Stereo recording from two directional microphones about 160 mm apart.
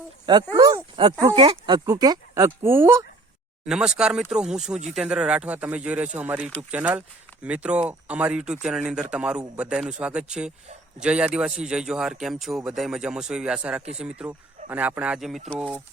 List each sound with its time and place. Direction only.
0.5 s speech: 25° right (ahead or behind)
3.7 s speech: 5° right (ahead or behind)